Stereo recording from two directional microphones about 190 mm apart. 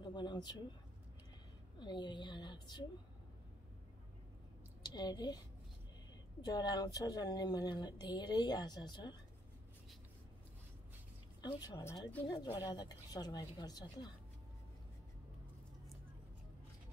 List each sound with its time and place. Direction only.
0.0 s a sound: 25° left (ahead or behind)
1.8 s speech: 25° left (ahead or behind)
4.8 s a woman's voice: 25° left (ahead or behind)
6.4 s speech: 20° left (ahead or behind)
11.4 s speech: 20° left (ahead or behind)